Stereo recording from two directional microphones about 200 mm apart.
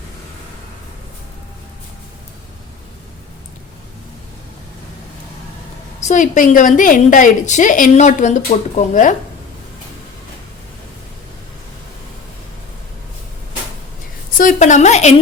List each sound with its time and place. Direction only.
6.0 s a woman's voice: 35° left (ahead or behind)
14.3 s a woman's voice: 40° left (ahead or behind)